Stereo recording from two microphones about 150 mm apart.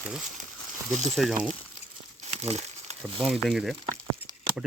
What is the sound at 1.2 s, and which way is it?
Speech, centre (ahead or behind).